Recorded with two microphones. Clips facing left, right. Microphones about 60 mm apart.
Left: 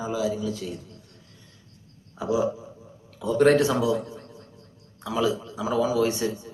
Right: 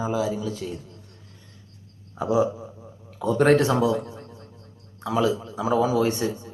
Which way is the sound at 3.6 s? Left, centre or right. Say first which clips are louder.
Right 2 dB; centre.